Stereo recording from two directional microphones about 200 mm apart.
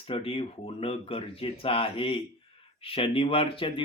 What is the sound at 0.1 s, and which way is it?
Speech, 30° left (ahead or behind).